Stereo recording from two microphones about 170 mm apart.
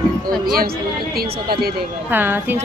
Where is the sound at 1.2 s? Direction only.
65° right (ahead or behind).